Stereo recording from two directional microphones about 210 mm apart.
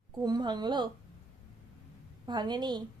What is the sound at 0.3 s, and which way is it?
Speech, 20° right (ahead or behind).